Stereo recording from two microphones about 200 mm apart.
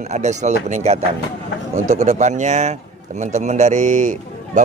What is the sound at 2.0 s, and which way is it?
Speech, 35° right (ahead or behind).